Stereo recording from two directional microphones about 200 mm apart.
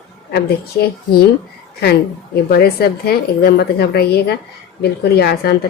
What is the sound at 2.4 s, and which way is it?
A woman's voice, 50° left (ahead or behind).